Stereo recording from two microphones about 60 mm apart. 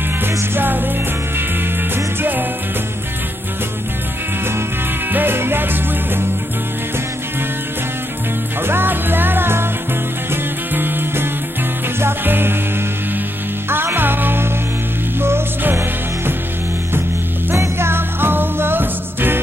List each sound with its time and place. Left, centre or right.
0.4 s music: right
5.1 s music: right
8.6 s music: right
13.7 s music: right
17.6 s music: right